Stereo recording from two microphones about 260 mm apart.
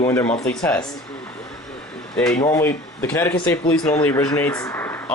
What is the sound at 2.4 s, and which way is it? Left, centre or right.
Speech, centre.